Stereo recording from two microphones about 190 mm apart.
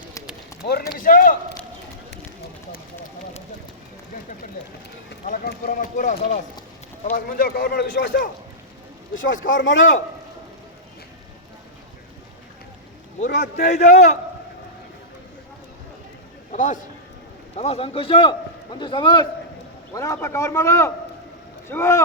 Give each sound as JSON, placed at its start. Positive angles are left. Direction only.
{"t": 0.7, "sound": "a man's voice", "side_deg": 50}
{"t": 5.5, "sound": "a man's voice", "side_deg": 50}
{"t": 9.1, "sound": "speech", "side_deg": 90}
{"t": 9.5, "sound": "a man's voice", "side_deg": 75}
{"t": 13.6, "sound": "a man's voice", "side_deg": 40}
{"t": 16.5, "sound": "a man's voice", "side_deg": 40}